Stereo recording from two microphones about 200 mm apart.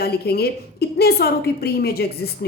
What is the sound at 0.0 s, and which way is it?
A woman's voice, 50° left (ahead or behind).